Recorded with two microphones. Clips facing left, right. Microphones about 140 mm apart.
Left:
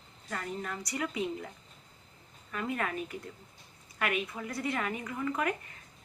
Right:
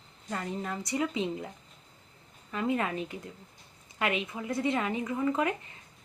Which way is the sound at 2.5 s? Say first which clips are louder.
Right 4 dB; 20° right (ahead or behind).